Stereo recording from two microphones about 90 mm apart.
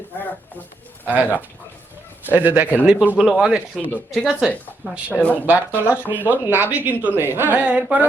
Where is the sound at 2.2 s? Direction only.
20° right (ahead or behind); by 4.5 s centre (ahead or behind).